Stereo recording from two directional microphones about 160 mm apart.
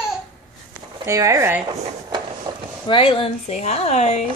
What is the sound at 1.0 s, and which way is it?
Speech, 20° right (ahead or behind).